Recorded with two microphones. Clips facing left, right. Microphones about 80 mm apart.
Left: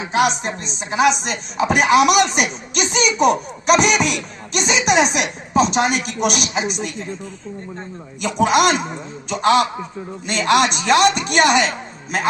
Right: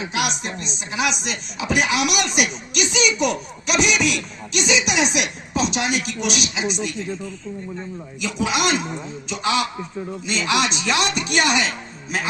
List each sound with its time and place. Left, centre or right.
0.1 s speech: left
8.4 s speech: left